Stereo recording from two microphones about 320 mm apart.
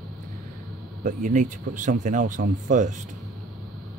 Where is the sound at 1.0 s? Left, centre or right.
Right.